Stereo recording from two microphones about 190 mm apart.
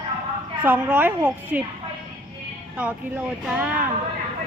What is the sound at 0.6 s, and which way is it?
Speech, 10° right (ahead or behind).